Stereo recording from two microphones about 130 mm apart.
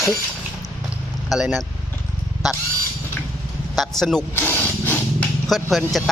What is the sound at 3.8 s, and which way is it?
Speech, centre (ahead or behind).